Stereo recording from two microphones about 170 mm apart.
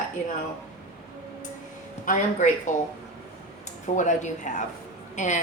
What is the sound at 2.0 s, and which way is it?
Speech, 45° left (ahead or behind).